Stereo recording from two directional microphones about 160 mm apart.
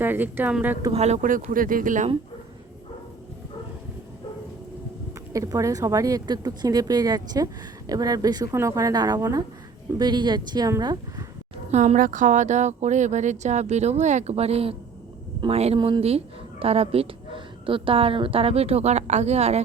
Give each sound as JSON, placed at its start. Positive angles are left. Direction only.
{"t": 0.0, "sound": "speech", "side_deg": -10}
{"t": 0.9, "sound": "speech", "side_deg": -45}
{"t": 5.3, "sound": "speech", "side_deg": -20}
{"t": 11.7, "sound": "speech", "side_deg": -45}